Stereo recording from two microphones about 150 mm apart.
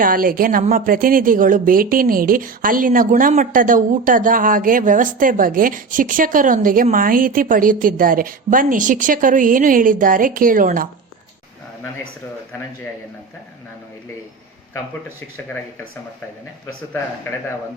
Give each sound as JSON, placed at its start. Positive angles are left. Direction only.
{"t": 0.0, "sound": "a woman's voice", "side_deg": -70}